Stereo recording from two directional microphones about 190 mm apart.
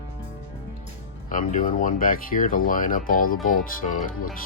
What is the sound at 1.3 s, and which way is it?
Speech, 45° left (ahead or behind).